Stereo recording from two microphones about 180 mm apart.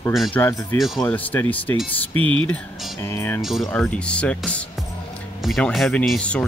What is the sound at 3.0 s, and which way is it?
Speech, 15° left (ahead or behind).